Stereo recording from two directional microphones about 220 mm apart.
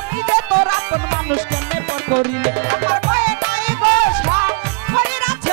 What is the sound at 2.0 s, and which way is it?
Music, 20° right (ahead or behind).